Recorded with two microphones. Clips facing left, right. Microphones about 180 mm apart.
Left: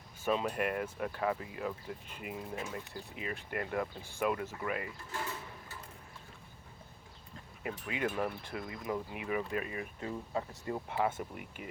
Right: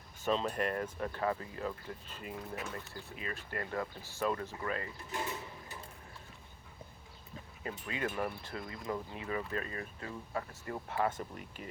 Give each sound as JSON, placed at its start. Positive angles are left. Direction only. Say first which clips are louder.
{"t": 0.3, "sound": "speech", "louder": "left 1 dB", "side_deg": 10}
{"t": 5.1, "sound": "a sound", "louder": "right 3 dB", "side_deg": -15}
{"t": 7.9, "sound": "speech", "louder": "left 2 dB", "side_deg": 15}